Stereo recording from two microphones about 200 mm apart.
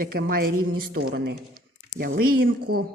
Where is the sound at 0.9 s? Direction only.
75° right (ahead or behind); by 2.8 s 50° right (ahead or behind).